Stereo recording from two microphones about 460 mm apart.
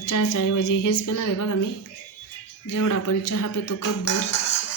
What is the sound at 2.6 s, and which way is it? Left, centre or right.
A woman's voice, left.